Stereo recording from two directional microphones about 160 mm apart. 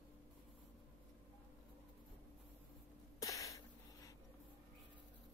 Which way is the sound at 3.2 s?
20° left (ahead or behind).